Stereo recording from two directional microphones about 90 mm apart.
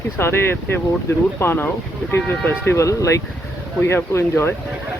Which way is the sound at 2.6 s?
30° left (ahead or behind).